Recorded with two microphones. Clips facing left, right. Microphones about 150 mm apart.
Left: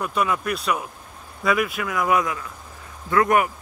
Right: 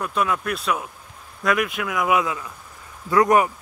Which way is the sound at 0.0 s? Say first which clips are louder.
Even; centre (ahead or behind).